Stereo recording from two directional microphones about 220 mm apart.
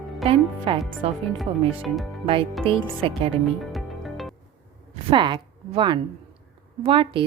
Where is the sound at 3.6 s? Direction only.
Centre (ahead or behind).